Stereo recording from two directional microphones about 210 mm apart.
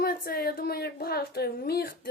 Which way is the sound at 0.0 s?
45° left (ahead or behind).